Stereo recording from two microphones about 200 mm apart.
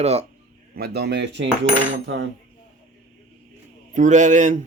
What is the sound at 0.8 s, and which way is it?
Speech, 55° right (ahead or behind).